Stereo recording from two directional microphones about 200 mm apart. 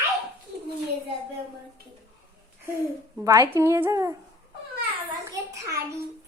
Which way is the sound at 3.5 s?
10° right (ahead or behind).